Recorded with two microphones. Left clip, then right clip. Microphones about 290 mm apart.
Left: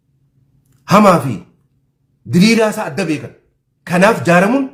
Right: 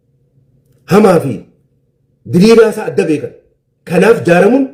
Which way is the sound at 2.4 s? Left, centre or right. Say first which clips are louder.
Right 6 dB; centre.